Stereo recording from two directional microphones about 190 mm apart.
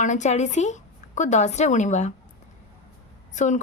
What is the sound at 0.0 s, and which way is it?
Speech, 40° left (ahead or behind).